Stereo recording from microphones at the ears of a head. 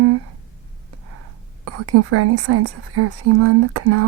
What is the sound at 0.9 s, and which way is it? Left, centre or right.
A woman's voice, right.